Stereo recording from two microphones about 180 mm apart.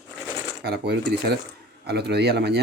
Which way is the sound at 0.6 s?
60° right (ahead or behind).